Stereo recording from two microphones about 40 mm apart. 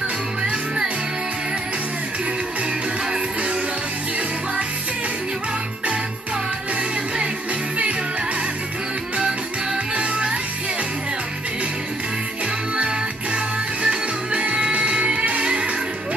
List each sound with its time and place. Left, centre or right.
0.4 s music: right
9.9 s music: right
12.7 s music: right